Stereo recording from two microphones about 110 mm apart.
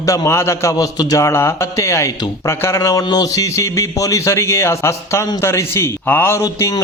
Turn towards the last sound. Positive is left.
turn(degrees=30)  # may be behind; listen again after turning